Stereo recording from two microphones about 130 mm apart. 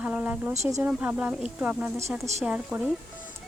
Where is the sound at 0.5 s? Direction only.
60° right (ahead or behind).